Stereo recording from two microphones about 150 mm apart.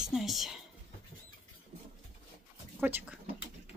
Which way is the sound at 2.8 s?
10° right (ahead or behind).